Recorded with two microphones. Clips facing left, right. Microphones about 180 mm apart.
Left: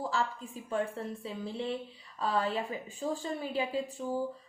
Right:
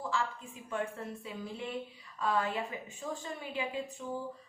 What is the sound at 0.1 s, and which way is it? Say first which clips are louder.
A woman's voice: left 2 dB; 35° left (ahead or behind).